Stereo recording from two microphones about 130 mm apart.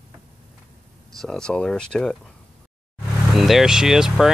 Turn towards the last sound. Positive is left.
turn(degrees=-5)  # may be behind; listen again after turning